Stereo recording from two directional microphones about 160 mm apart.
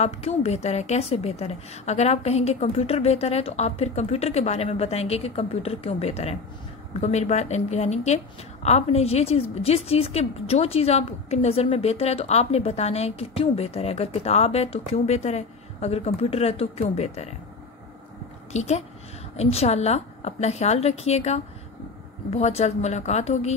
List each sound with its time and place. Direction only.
0.0 s a woman's voice: 40° left (ahead or behind)
18.5 s a woman's voice: 45° left (ahead or behind)